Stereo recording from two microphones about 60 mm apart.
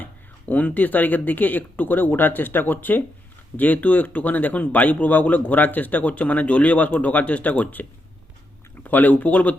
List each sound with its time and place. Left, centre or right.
0.0 s speech: left